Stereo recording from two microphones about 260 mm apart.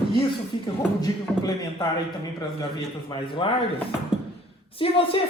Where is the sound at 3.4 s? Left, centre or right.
Centre.